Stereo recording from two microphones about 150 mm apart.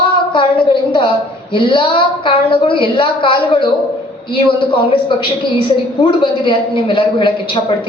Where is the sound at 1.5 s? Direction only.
35° left (ahead or behind).